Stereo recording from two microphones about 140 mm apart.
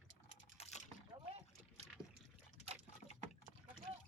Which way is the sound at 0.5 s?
50° left (ahead or behind).